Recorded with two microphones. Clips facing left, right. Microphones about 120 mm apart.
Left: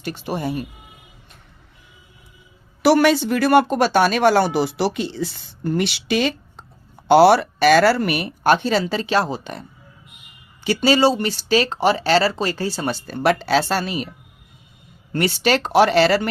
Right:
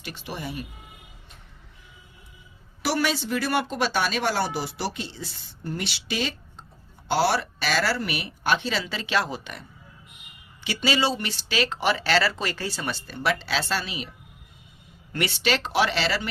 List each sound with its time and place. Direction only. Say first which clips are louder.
0.0 s speech: left 9 dB; 45° left (ahead or behind)
2.8 s speech: left 11 dB; 60° left (ahead or behind)
15.1 s speech: left 7 dB; 40° left (ahead or behind)